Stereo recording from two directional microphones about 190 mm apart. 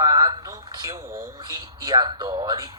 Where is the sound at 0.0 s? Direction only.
20° right (ahead or behind).